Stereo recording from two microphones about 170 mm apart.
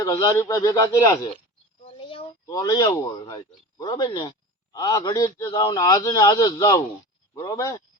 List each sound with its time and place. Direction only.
0.0 s speech: 20° left (ahead or behind)
1.8 s a sound: 35° left (ahead or behind)
2.5 s speech: 20° left (ahead or behind)